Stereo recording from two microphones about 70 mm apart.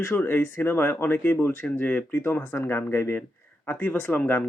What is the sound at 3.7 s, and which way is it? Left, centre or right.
Speech, left.